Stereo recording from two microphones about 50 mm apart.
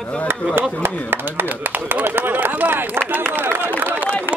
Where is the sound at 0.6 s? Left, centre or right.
Right.